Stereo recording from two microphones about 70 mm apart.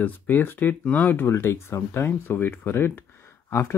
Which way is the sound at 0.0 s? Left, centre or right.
Left.